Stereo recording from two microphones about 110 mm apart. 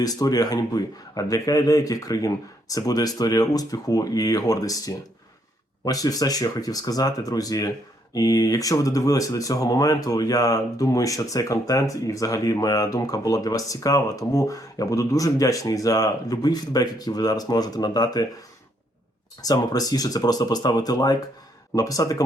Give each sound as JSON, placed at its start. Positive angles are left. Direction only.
{"t": 0.0, "sound": "speech", "side_deg": 35}
{"t": 19.4, "sound": "speech", "side_deg": 35}